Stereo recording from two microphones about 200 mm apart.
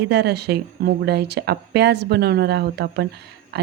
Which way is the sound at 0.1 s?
55° right (ahead or behind).